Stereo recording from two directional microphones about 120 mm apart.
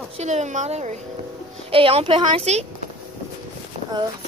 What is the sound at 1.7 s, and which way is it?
Speech, 50° right (ahead or behind).